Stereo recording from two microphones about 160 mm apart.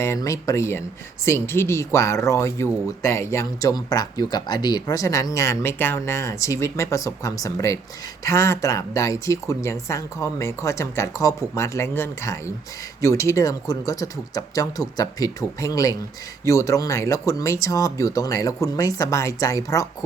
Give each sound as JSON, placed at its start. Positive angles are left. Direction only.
{"t": 0.0, "sound": "speech", "side_deg": 15}